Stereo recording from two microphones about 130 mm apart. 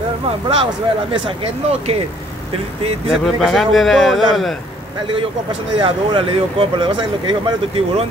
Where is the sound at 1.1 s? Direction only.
45° right (ahead or behind).